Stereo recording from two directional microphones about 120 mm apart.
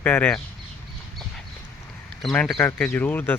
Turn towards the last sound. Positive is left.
turn(degrees=15)  # may be behind; listen again after turning